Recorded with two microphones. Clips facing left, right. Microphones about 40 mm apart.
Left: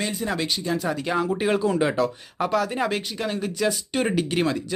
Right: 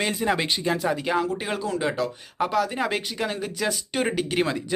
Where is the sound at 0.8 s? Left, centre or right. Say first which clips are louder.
Right 1 dB; centre.